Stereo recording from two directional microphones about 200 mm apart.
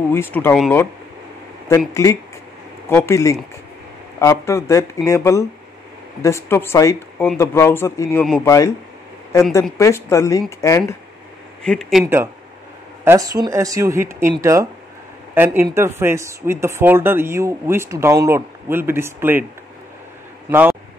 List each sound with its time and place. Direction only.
0.1 s a man's voice: 10° left (ahead or behind)
2.0 s a man's voice: 15° left (ahead or behind)
9.8 s a man's voice: 15° left (ahead or behind)
11.6 s speech: 5° left (ahead or behind)
12.0 s speech: 10° right (ahead or behind)
20.4 s speech: 10° right (ahead or behind)